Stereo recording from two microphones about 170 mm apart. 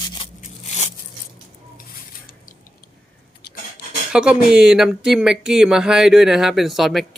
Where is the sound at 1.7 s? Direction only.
55° left (ahead or behind).